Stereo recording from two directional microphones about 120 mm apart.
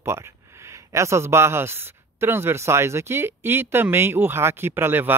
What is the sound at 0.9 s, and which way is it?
Speech, 25° right (ahead or behind).